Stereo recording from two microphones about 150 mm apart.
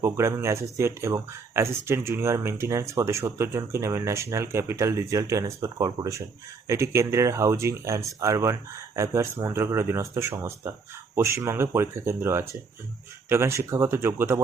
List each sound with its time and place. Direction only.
0.0 s speech: 20° right (ahead or behind)